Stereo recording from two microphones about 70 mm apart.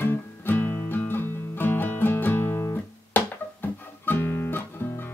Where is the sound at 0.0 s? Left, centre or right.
Left.